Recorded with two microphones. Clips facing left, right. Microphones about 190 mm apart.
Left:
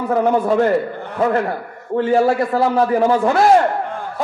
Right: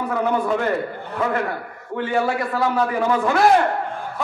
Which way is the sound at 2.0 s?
30° left (ahead or behind).